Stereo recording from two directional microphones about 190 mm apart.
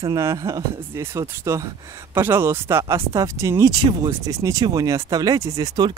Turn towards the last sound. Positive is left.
turn(degrees=-20)  # may be behind; listen again after turning